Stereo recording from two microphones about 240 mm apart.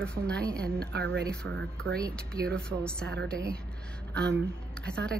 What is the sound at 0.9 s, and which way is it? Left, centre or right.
Speech, right.